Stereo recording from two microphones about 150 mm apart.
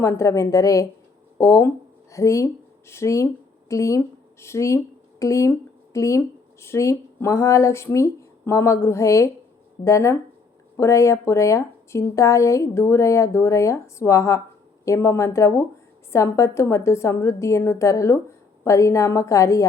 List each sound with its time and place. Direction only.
0.0 s speech: 20° left (ahead or behind)